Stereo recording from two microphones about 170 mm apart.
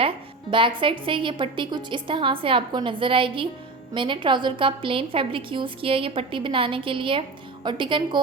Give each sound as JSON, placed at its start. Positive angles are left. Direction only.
{"t": 0.8, "sound": "a woman's voice", "side_deg": -30}